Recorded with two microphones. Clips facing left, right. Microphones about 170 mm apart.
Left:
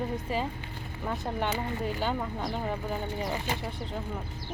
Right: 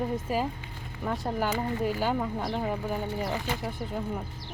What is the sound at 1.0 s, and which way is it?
Speech, centre (ahead or behind).